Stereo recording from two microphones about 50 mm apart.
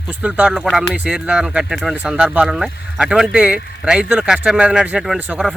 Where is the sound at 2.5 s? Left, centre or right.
Centre.